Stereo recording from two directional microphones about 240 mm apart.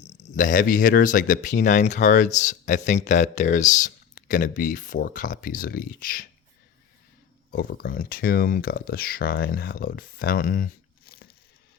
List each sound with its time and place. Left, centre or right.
0.0 s speech: left
7.5 s speech: left